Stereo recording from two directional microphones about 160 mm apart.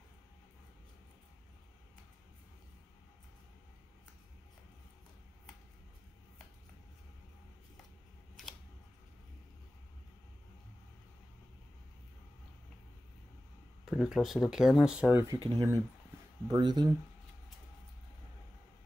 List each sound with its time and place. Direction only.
13.8 s speech: 5° right (ahead or behind)
15.3 s speech: 30° right (ahead or behind)